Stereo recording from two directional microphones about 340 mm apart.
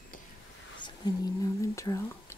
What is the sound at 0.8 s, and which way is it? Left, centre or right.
Whispering, centre.